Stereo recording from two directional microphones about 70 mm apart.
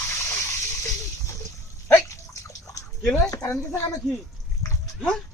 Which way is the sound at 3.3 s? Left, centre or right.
Left.